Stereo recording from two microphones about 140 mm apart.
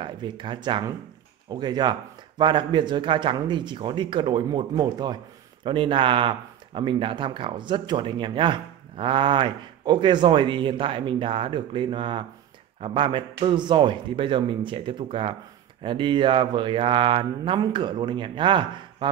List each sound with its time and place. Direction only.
0.0 s speech: 35° right (ahead or behind)